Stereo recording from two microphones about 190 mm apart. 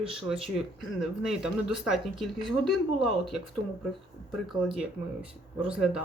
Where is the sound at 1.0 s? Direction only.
5° right (ahead or behind).